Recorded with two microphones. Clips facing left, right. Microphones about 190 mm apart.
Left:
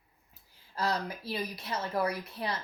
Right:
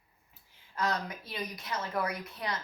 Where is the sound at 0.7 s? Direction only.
30° left (ahead or behind).